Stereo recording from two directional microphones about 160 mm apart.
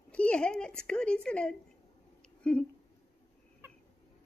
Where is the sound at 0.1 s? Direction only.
5° left (ahead or behind).